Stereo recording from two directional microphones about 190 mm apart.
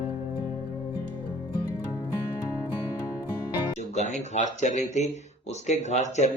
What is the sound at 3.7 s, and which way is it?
Music, 35° left (ahead or behind).